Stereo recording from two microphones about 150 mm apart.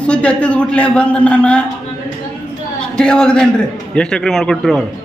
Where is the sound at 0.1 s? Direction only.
10° left (ahead or behind).